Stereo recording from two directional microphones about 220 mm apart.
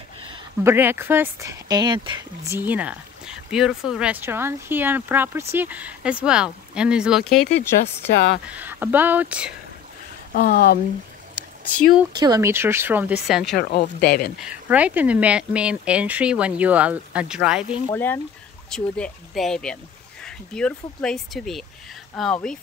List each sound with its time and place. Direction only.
0.7 s speech: 10° right (ahead or behind)
8.5 s speech: 10° right (ahead or behind)
10.3 s speech: 40° left (ahead or behind)
12.2 s speech: 15° right (ahead or behind)
13.6 s speech: 50° left (ahead or behind)
14.4 s speech: 5° right (ahead or behind)
17.8 s speech: 10° left (ahead or behind)